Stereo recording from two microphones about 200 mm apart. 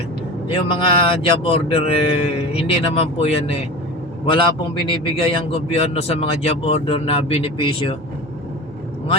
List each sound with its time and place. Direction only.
0.4 s a man's voice: 30° left (ahead or behind)